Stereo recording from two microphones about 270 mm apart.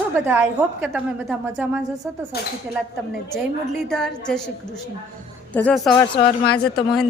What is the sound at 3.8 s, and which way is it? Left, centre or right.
Speech, centre.